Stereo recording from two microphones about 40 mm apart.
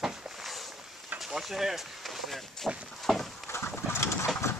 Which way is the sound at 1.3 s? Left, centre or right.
Centre.